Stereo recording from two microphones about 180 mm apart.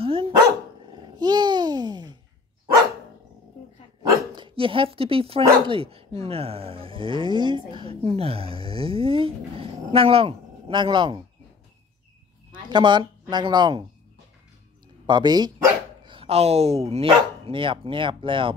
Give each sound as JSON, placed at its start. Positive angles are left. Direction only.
{"t": 0.0, "sound": "dog", "side_deg": -30}
{"t": 1.2, "sound": "babbling", "side_deg": -25}
{"t": 4.4, "sound": "speech", "side_deg": -30}
{"t": 12.6, "sound": "speech", "side_deg": -25}
{"t": 15.0, "sound": "speech", "side_deg": -25}